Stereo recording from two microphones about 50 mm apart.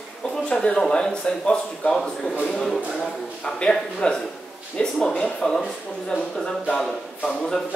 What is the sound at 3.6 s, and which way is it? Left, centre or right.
Speech, centre.